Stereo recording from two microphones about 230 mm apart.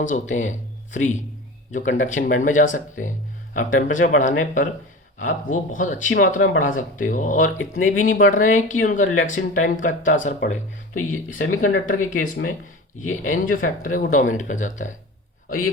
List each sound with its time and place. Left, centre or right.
0.0 s speech: left